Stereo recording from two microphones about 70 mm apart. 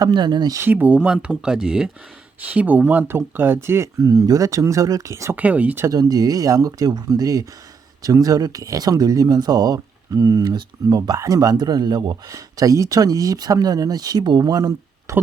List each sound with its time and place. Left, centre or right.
0.0 s speech: right
0.6 s speech: right; by 1.9 s centre
2.5 s speech: right
3.9 s speech: right
5.4 s speech: right
5.9 s speech: right
11.2 s speech: right
12.3 s speech: right
15.1 s speech: right